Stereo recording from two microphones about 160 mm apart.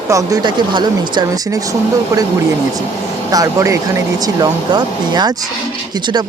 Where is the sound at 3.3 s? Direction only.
20° right (ahead or behind).